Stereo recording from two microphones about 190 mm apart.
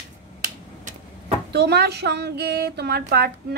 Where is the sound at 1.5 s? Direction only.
60° right (ahead or behind).